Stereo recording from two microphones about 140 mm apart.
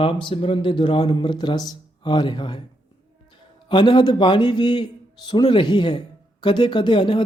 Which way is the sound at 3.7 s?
35° left (ahead or behind).